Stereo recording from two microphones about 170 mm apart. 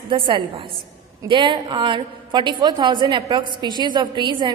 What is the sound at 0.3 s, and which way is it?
A woman's voice, 30° right (ahead or behind).